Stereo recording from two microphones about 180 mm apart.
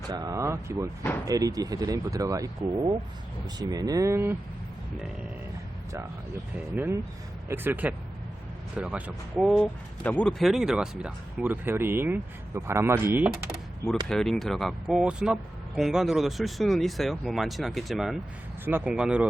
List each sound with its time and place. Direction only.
0.1 s speech: 20° right (ahead or behind)
6.7 s speech: 10° right (ahead or behind)
9.5 s speech: 5° left (ahead or behind)
14.1 s speech: centre (ahead or behind)